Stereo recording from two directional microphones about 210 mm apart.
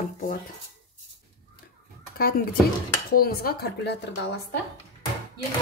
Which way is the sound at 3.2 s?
45° left (ahead or behind).